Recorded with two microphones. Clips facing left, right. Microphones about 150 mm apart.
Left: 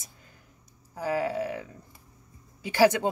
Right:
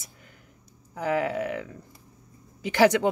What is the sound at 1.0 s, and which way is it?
Speech, 60° right (ahead or behind).